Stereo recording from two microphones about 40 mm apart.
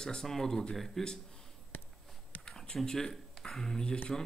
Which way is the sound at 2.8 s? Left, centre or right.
Centre.